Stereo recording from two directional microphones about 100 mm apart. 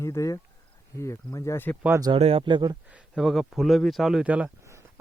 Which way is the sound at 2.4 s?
50° right (ahead or behind).